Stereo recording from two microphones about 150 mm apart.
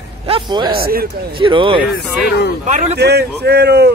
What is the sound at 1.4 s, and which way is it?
Speech, 35° right (ahead or behind).